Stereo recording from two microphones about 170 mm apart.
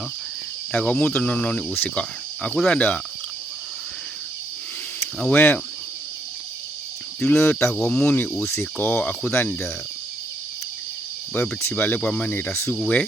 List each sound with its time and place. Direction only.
0.7 s cricket: 5° left (ahead or behind)
5.2 s cricket: 10° left (ahead or behind)
7.2 s cricket: 10° left (ahead or behind)
11.3 s cricket: 15° left (ahead or behind)